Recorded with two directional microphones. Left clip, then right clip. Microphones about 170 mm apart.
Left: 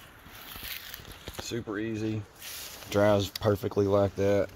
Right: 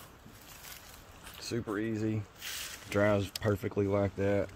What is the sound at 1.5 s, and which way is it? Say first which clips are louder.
Speech: left 1 dB; centre (ahead or behind).